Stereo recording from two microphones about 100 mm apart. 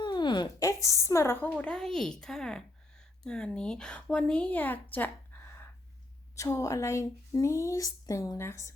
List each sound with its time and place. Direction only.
0.0 s a sound: 50° left (ahead or behind)
0.6 s a woman's voice: 30° left (ahead or behind)
6.3 s speech: 30° left (ahead or behind)